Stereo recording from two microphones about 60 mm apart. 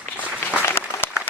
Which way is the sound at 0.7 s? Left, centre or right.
Left.